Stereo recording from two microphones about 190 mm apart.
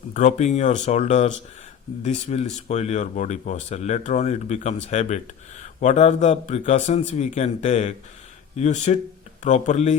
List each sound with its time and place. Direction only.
0.1 s speech: 40° left (ahead or behind)